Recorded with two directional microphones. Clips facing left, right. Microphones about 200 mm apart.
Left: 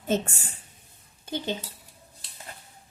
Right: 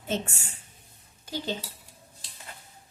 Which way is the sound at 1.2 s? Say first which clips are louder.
Left 2 dB; 25° left (ahead or behind).